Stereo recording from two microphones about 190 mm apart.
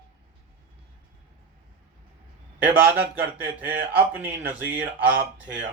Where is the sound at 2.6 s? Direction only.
10° right (ahead or behind).